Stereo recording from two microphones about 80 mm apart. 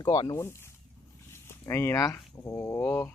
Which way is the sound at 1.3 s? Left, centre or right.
Left.